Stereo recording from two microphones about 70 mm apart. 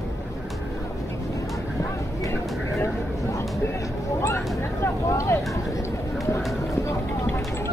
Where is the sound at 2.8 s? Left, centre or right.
Left.